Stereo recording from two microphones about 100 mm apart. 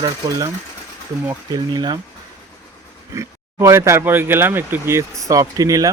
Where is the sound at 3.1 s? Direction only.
30° right (ahead or behind).